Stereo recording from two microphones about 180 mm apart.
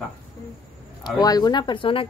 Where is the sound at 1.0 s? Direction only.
20° left (ahead or behind).